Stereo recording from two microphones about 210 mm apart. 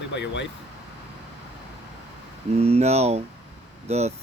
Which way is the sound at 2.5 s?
30° right (ahead or behind).